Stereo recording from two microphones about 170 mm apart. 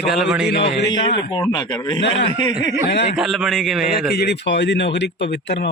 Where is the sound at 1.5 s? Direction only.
25° left (ahead or behind).